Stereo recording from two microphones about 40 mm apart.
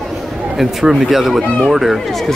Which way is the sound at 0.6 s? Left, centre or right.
Centre.